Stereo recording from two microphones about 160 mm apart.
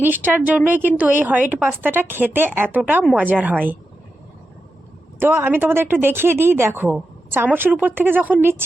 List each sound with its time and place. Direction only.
0.0 s a woman's voice: 10° right (ahead or behind)
5.2 s a woman's voice: 15° right (ahead or behind)